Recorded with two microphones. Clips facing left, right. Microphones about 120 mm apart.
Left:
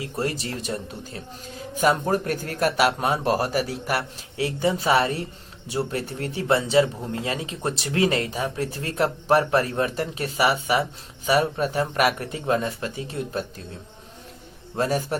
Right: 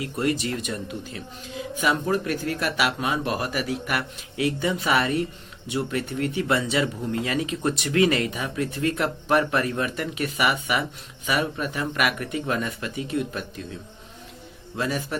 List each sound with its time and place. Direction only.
0.0 s speech: 30° left (ahead or behind)
14.8 s speech: 40° left (ahead or behind)